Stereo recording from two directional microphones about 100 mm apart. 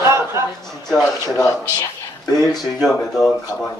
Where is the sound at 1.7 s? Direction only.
35° left (ahead or behind).